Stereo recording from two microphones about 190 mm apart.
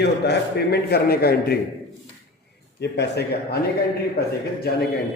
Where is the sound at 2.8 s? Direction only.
65° left (ahead or behind).